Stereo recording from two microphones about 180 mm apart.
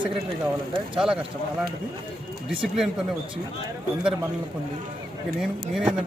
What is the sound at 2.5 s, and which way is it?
Speech, centre (ahead or behind).